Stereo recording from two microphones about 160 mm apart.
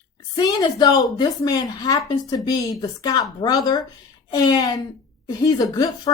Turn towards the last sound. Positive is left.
turn(degrees=25)  # may be behind; listen again after turning